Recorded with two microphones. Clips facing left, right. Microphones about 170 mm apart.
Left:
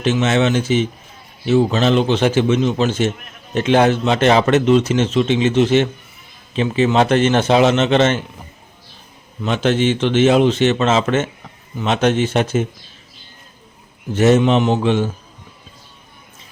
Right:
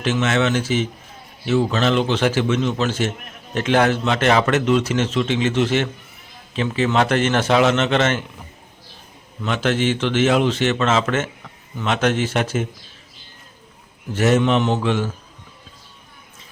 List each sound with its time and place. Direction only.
0.0 s speech: 20° left (ahead or behind)
9.4 s speech: 20° left (ahead or behind)
14.1 s speech: 20° left (ahead or behind)